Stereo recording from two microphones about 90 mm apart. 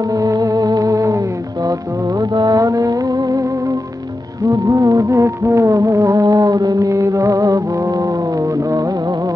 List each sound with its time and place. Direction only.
0.1 s music: 40° right (ahead or behind)
4.5 s music: 35° right (ahead or behind)